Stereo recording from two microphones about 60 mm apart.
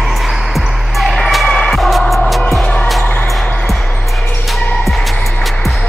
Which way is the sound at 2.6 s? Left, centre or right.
Left.